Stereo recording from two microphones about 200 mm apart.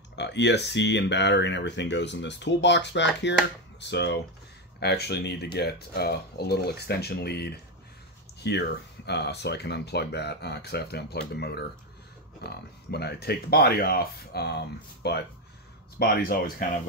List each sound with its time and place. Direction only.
0.1 s speech: 60° left (ahead or behind)